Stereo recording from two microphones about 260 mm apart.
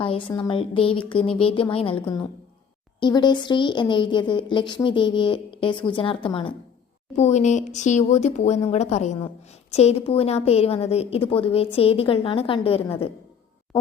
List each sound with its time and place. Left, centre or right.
0.0 s a woman's voice: centre